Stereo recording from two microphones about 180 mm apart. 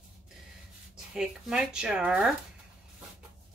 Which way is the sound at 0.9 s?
5° right (ahead or behind).